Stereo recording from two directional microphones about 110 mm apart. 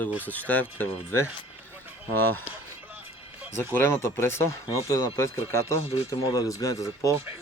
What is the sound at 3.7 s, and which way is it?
Speech, 20° left (ahead or behind).